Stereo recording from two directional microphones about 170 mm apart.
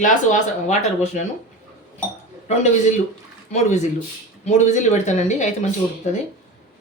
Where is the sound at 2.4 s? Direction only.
40° left (ahead or behind).